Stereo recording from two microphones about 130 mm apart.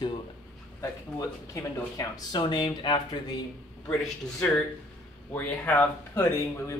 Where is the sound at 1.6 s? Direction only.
30° left (ahead or behind).